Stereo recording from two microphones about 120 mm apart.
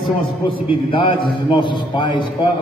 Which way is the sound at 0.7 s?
45° left (ahead or behind).